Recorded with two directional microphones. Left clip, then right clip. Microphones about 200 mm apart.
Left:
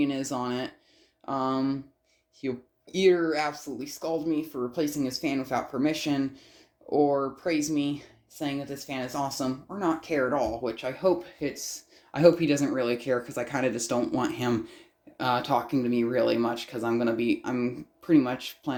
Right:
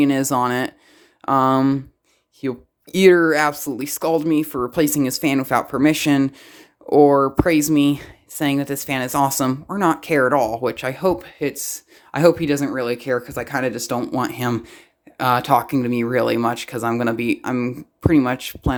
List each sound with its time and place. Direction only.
0.0 s speech: 40° right (ahead or behind)
12.4 s speech: 25° right (ahead or behind)